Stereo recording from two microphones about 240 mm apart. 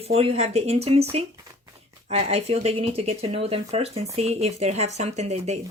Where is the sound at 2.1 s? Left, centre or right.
Right.